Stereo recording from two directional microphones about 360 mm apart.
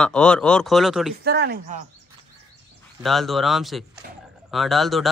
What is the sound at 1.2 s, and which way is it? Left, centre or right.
Speech, right.